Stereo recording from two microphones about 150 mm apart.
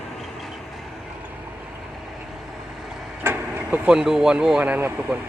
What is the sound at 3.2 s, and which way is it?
Speech, 10° right (ahead or behind).